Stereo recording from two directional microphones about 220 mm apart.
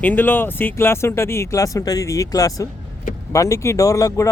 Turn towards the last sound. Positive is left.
turn(degrees=15)  # may be behind; listen again after turning